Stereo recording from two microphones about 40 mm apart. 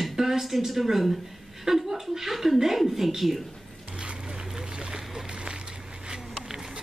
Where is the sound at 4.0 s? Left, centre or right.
Right.